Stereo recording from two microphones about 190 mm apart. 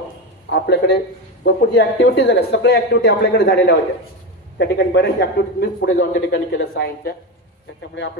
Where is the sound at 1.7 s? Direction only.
65° left (ahead or behind).